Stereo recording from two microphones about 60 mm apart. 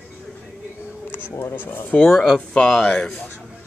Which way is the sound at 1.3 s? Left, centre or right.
Left.